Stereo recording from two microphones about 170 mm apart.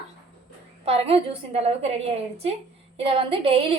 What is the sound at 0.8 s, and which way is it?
A woman's voice, 35° right (ahead or behind).